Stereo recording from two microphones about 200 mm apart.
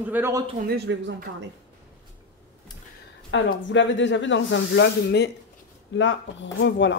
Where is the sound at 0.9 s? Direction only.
65° right (ahead or behind).